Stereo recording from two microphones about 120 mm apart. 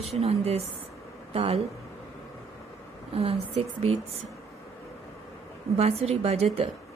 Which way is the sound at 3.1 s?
55° right (ahead or behind).